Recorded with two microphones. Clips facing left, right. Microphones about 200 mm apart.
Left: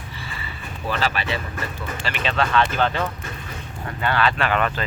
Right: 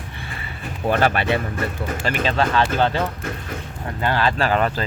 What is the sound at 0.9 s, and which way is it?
Speech, 55° right (ahead or behind).